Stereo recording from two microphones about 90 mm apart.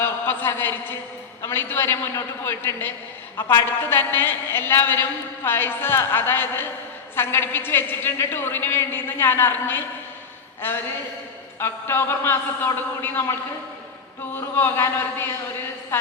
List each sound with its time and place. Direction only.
0.0 s a sound: 25° left (ahead or behind)
1.4 s a woman's voice: 25° left (ahead or behind)
14.5 s a woman's voice: 25° left (ahead or behind)